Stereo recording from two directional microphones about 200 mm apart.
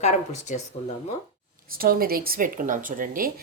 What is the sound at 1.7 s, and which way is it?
Speech, 45° right (ahead or behind).